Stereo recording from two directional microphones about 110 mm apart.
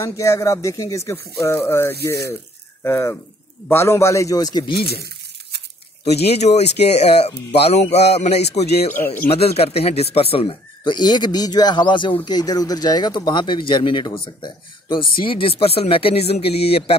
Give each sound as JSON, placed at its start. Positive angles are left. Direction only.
{"t": 0.0, "sound": "speech", "side_deg": 25}
{"t": 6.0, "sound": "speech", "side_deg": 75}
{"t": 8.9, "sound": "speech", "side_deg": 20}
{"t": 9.3, "sound": "speech", "side_deg": 65}
{"t": 10.8, "sound": "speech", "side_deg": 40}
{"t": 12.3, "sound": "speech", "side_deg": 35}